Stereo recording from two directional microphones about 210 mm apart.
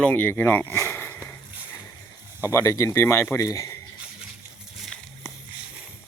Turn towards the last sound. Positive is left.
turn(degrees=0)  # may be behind; listen again after turning